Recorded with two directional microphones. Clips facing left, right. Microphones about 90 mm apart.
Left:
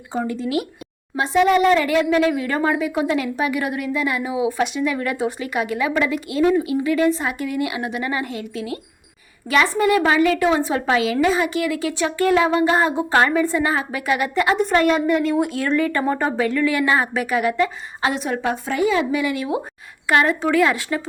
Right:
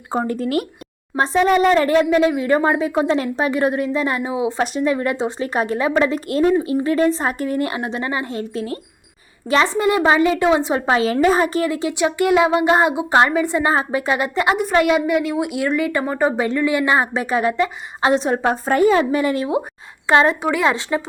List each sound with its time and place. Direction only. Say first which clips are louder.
0.1 s speech: right 2 dB; 45° right (ahead or behind)
1.1 s speech: right 1 dB; 35° right (ahead or behind)
2.0 s a woman's voice: right 3 dB; 25° right (ahead or behind)
6.2 s speech: right 1 dB; 45° right (ahead or behind)
6.6 s speech: right 1 dB; 35° right (ahead or behind)
7.8 s a woman's voice: right 1 dB; 30° right (ahead or behind)
8.4 s speech: right 3 dB; 40° right (ahead or behind)
9.5 s a woman's voice: right 1 dB; 25° right (ahead or behind)
12.9 s a woman's voice: right 2 dB; 10° right (ahead or behind); by 14.5 s 25° right (ahead or behind)
14.5 s a woman's voice: right 1 dB; 10° right (ahead or behind)
16.3 s a woman's voice: right 1 dB; 25° right (ahead or behind); by 19.5 s 40° right (ahead or behind)
20.1 s a woman's voice: right 2 dB; 25° right (ahead or behind)